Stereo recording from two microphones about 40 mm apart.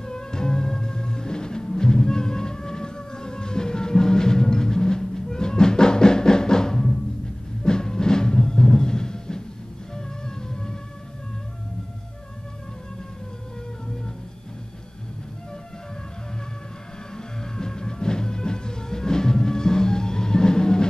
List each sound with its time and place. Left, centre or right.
0.0 s music: centre
17.6 s music: centre